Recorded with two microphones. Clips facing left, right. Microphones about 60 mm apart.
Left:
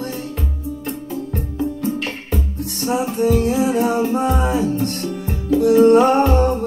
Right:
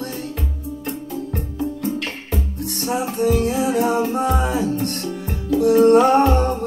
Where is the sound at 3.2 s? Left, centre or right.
Left.